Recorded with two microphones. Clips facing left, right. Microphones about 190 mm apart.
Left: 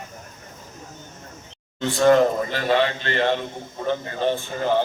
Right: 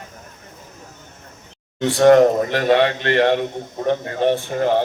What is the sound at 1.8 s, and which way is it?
A man's voice, 70° right (ahead or behind).